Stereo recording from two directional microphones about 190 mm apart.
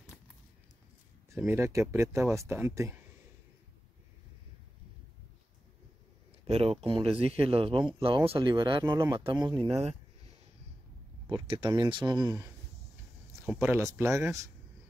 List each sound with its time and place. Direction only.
1.3 s speech: 10° right (ahead or behind)
6.4 s speech: 35° right (ahead or behind)
11.4 s speech: 25° right (ahead or behind)
13.5 s speech: 10° right (ahead or behind)